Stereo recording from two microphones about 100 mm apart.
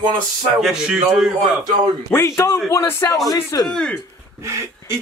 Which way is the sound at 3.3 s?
40° left (ahead or behind).